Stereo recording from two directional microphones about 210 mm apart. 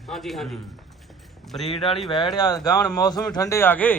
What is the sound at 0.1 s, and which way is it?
Speech, centre (ahead or behind).